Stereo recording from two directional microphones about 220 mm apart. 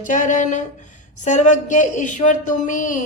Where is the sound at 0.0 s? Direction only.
35° left (ahead or behind).